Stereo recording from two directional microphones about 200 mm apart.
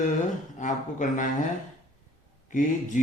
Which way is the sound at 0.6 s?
40° left (ahead or behind).